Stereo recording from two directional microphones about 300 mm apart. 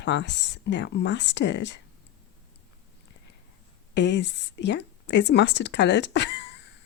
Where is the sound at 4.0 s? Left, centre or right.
Left.